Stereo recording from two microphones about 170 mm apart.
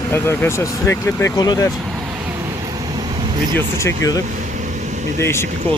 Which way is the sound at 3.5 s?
15° left (ahead or behind).